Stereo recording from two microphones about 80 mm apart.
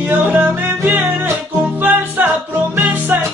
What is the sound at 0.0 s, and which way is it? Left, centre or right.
Music, right.